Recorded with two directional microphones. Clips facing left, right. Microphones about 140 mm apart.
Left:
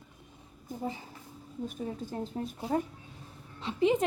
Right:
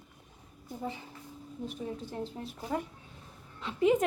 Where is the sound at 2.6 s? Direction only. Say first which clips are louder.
Left 3 dB; 35° left (ahead or behind).